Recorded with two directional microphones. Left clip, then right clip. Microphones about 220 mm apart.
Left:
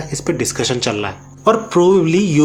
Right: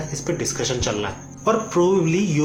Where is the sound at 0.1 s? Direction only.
45° left (ahead or behind).